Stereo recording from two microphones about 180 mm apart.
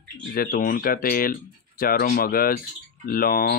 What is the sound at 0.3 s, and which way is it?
Speech, 55° left (ahead or behind).